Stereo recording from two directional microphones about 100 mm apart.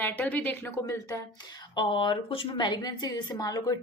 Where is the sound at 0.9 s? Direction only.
30° left (ahead or behind).